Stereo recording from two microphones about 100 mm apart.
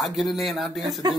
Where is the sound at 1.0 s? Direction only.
45° right (ahead or behind).